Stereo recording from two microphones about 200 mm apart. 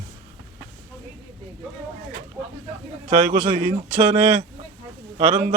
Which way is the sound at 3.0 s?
30° right (ahead or behind).